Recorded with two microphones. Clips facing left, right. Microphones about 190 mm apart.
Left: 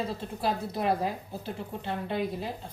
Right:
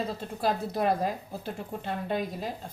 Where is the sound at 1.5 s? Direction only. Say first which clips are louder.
Even; 50° right (ahead or behind).